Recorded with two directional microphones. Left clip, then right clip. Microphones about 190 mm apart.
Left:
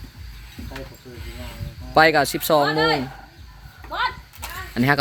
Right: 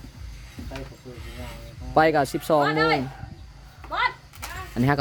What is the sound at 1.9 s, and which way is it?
Speech, 10° right (ahead or behind).